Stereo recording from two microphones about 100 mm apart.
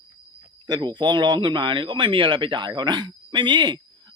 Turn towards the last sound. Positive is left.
turn(degrees=-50)  # may be behind; listen again after turning